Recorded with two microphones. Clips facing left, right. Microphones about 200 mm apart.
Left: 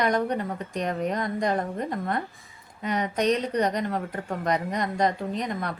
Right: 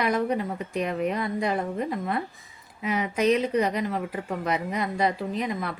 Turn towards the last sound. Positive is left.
turn(degrees=-5)  # may be behind; listen again after turning